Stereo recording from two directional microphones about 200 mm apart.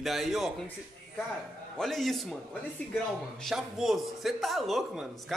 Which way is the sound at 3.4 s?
Centre (ahead or behind).